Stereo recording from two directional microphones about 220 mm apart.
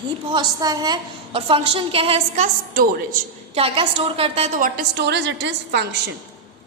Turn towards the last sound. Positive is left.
turn(degrees=-55)  # may be behind; listen again after turning